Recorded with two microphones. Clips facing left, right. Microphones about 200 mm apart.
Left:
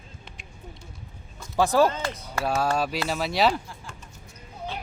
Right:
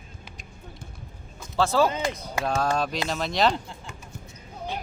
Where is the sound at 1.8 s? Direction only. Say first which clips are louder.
Right 1 dB; 15° right (ahead or behind).